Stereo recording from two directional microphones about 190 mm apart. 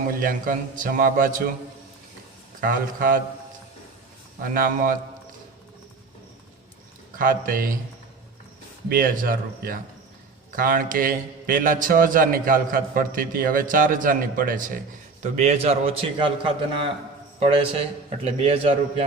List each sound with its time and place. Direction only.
0.2 s a man's voice: 45° right (ahead or behind)
2.6 s a man's voice: 45° right (ahead or behind)
4.5 s a man's voice: 50° right (ahead or behind)
7.2 s a man's voice: 45° right (ahead or behind)
8.9 s a man's voice: 50° right (ahead or behind); by 19.0 s 30° right (ahead or behind)